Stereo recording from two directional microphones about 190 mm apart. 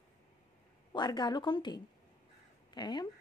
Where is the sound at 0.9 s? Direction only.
25° left (ahead or behind).